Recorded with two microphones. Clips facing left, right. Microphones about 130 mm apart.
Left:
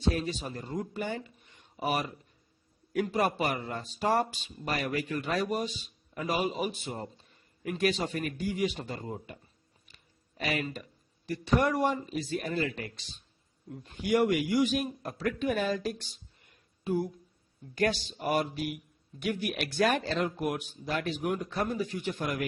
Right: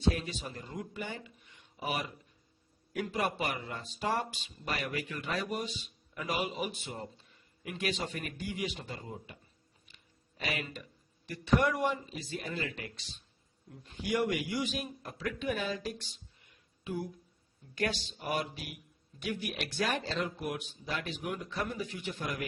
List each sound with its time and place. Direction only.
0.1 s speech: 35° left (ahead or behind)
9.9 s a sound: 40° left (ahead or behind)
11.3 s speech: 35° left (ahead or behind)
12.0 s speech: 55° left (ahead or behind)
12.5 s speech: 40° left (ahead or behind)
16.1 s a sound: 45° left (ahead or behind)
18.0 s speech: 45° left (ahead or behind)
19.2 s speech: 55° left (ahead or behind)